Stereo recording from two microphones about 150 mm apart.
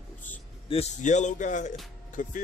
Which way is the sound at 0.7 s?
45° left (ahead or behind).